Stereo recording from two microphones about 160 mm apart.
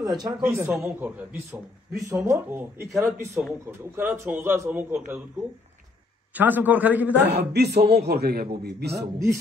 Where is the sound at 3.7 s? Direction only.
15° right (ahead or behind).